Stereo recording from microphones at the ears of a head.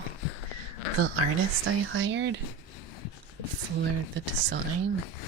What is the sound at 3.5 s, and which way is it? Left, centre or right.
Speech, right.